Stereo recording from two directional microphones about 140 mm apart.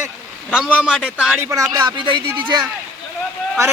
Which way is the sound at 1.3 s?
20° right (ahead or behind).